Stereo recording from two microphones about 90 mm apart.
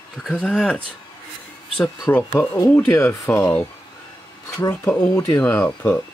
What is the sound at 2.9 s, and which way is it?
Speech, 30° left (ahead or behind).